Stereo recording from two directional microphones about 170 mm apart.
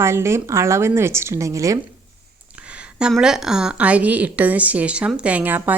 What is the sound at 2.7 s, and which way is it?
A woman's voice, 5° right (ahead or behind).